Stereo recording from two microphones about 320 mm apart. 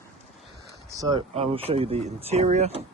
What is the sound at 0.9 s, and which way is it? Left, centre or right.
Speech, centre.